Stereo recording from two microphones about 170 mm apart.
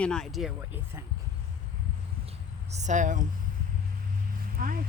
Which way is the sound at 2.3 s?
40° right (ahead or behind).